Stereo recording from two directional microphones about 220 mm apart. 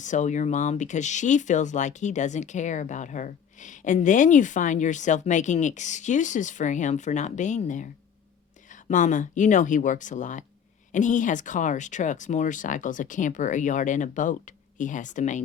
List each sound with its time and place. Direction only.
0.0 s speech: 35° left (ahead or behind)